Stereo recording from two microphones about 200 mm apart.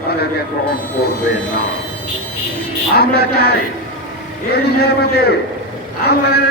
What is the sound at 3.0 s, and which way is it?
Speech, 50° left (ahead or behind).